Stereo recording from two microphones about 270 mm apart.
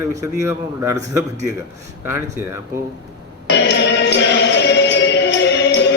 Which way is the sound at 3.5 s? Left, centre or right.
Left.